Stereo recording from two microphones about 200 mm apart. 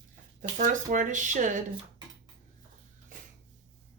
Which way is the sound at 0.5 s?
40° right (ahead or behind).